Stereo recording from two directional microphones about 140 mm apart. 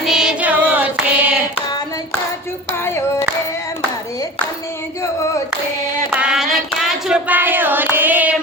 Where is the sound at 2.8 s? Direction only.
20° left (ahead or behind).